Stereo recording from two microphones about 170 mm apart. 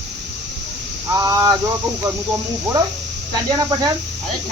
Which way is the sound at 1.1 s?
20° right (ahead or behind).